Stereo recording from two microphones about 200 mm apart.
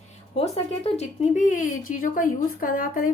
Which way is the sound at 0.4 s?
30° left (ahead or behind).